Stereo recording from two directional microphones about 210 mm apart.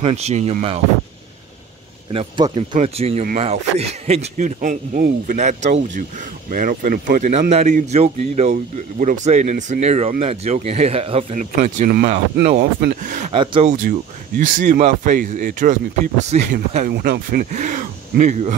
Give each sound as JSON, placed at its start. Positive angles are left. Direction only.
{"t": 0.0, "sound": "speech", "side_deg": -30}
{"t": 2.1, "sound": "speech", "side_deg": -25}
{"t": 13.3, "sound": "speech", "side_deg": -25}
{"t": 13.8, "sound": "speech", "side_deg": -40}